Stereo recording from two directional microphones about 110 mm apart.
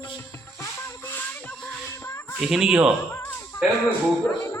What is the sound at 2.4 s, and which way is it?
Speech, 5° right (ahead or behind).